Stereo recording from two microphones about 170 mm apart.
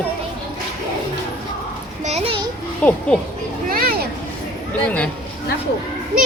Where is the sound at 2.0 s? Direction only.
35° right (ahead or behind).